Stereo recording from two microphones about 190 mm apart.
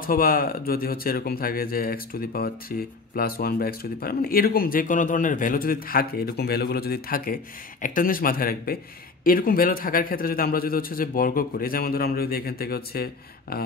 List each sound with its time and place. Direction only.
0.0 s a man's voice: 50° left (ahead or behind)